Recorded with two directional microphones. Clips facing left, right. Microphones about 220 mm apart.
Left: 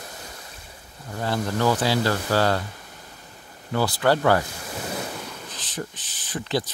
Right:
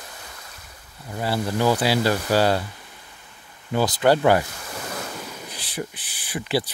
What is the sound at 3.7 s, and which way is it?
Speech, 15° right (ahead or behind).